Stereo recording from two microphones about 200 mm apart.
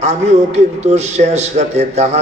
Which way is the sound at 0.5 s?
35° right (ahead or behind).